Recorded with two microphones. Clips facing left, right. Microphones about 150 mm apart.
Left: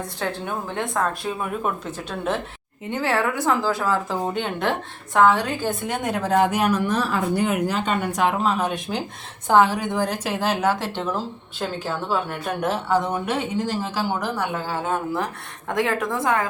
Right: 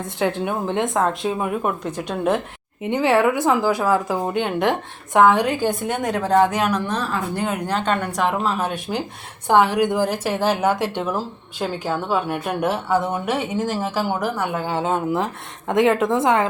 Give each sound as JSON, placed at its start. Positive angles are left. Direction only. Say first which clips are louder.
{"t": 0.2, "sound": "a woman's voice", "louder": "right 7 dB", "side_deg": -15}
{"t": 6.0, "sound": "a woman's voice", "louder": "right 3 dB", "side_deg": 5}